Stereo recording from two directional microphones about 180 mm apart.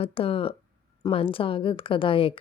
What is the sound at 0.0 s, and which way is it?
A woman's voice, 30° left (ahead or behind).